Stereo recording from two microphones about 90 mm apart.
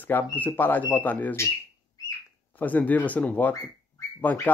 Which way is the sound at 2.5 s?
20° left (ahead or behind).